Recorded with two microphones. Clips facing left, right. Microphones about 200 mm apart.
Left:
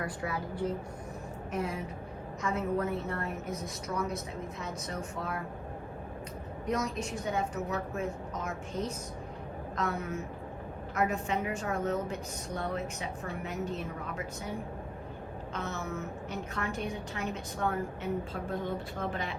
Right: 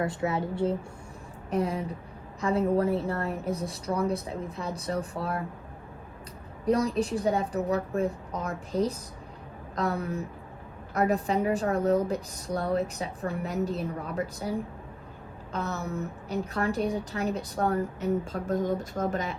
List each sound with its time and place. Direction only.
0.0 s a woman's voice: 25° right (ahead or behind)
6.7 s a woman's voice: 35° right (ahead or behind)
15.5 s a woman's voice: 35° right (ahead or behind)